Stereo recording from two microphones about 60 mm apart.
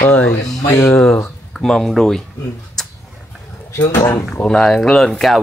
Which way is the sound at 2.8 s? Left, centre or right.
Centre.